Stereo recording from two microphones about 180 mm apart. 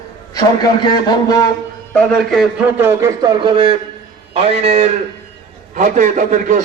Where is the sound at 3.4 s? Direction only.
30° right (ahead or behind).